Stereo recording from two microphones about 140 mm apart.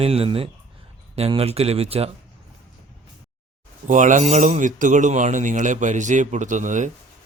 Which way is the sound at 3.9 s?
60° right (ahead or behind).